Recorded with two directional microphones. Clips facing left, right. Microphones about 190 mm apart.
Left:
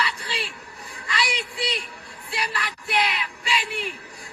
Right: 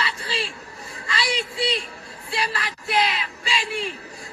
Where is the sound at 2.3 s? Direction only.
25° right (ahead or behind).